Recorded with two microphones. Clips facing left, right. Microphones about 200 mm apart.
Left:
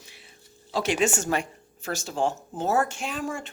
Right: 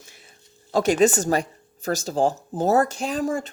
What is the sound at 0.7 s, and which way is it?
Speech, 40° right (ahead or behind).